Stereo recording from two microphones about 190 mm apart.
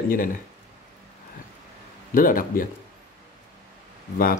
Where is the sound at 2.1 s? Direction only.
45° left (ahead or behind).